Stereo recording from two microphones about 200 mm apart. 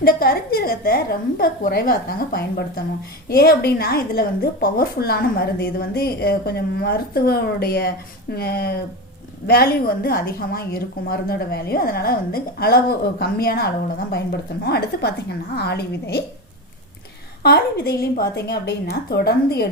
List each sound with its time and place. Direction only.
0.0 s a woman's voice: 50° left (ahead or behind)
17.4 s speech: 50° left (ahead or behind)